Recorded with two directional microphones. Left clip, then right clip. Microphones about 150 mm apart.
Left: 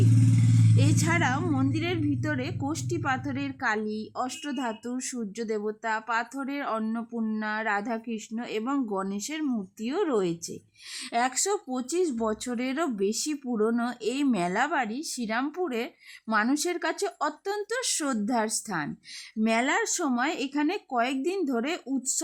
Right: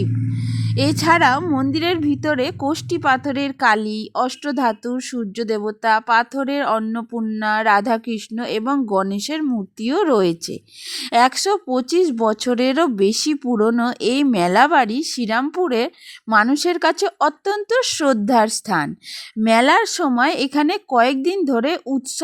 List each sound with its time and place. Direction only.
0.8 s a woman's voice: 55° right (ahead or behind)